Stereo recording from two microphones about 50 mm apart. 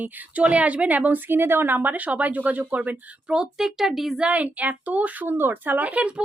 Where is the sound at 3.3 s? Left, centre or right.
Centre.